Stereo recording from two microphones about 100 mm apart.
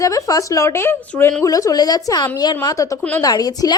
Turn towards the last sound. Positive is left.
turn(degrees=40)  # may be behind; listen again after turning